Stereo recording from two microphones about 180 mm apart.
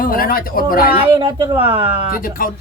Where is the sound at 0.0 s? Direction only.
55° left (ahead or behind).